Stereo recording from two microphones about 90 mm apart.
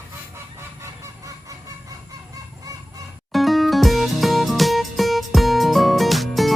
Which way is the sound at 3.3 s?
Centre (ahead or behind).